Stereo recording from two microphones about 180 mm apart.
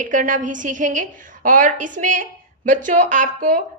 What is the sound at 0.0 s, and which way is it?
A woman's voice, 45° right (ahead or behind).